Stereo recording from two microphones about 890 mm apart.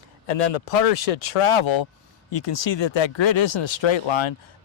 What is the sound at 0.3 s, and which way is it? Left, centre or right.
Speech, left.